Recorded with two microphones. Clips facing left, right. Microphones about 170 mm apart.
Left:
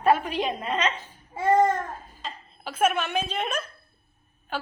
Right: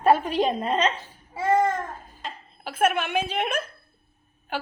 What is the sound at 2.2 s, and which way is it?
A woman's voice, 10° right (ahead or behind).